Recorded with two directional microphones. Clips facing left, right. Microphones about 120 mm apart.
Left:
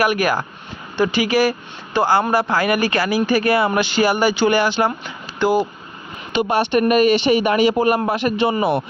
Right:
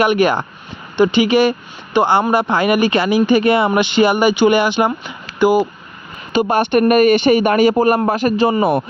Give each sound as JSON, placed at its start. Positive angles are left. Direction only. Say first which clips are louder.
{"t": 0.0, "sound": "speech", "louder": "right 4 dB", "side_deg": -25}
{"t": 6.3, "sound": "speech", "louder": "right 3 dB", "side_deg": -50}